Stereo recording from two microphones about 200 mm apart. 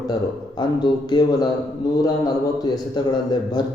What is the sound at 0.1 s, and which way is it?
A man's voice, 20° left (ahead or behind).